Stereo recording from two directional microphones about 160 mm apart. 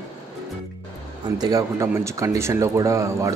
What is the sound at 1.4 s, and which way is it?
Speech, 20° right (ahead or behind).